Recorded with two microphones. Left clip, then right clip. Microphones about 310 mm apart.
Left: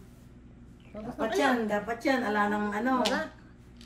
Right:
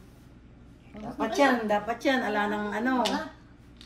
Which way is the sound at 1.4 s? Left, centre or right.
Right.